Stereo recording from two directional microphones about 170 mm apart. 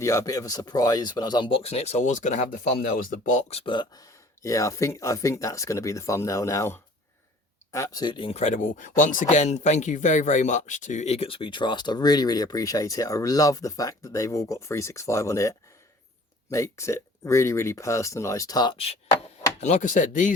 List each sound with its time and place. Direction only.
0.0 s speech: 20° left (ahead or behind); by 2.7 s 45° left (ahead or behind)
2.7 s speech: 55° left (ahead or behind)
3.6 s speech: 25° left (ahead or behind); by 20.3 s 50° left (ahead or behind)